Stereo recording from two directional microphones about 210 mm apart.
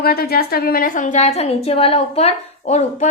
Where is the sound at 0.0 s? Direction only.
45° left (ahead or behind).